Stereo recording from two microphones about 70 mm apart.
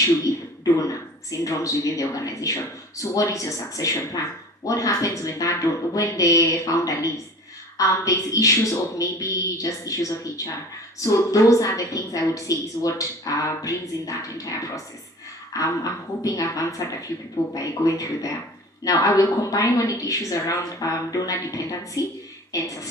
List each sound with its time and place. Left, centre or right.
0.3 s a woman's voice: left